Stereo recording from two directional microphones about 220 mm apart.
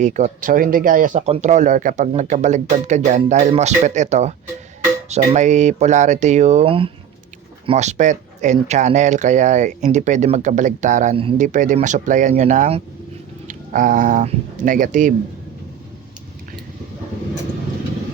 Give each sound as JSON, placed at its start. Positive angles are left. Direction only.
{"t": 0.0, "sound": "speech", "side_deg": -35}